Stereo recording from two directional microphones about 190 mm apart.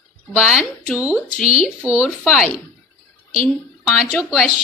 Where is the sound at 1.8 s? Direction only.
5° right (ahead or behind).